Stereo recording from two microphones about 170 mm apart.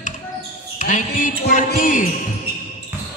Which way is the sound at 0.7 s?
50° left (ahead or behind).